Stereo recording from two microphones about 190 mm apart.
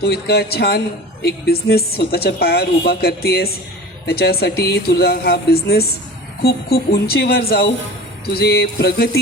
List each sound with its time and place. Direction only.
0.0 s a woman's voice: 55° left (ahead or behind)